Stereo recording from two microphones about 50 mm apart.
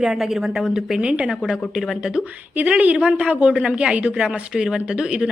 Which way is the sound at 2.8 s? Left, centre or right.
Right.